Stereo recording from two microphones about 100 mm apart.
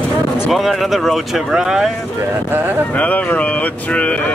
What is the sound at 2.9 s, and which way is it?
Speech, 15° left (ahead or behind).